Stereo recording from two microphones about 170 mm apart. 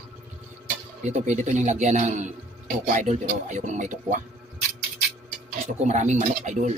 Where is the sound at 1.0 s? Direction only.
45° right (ahead or behind).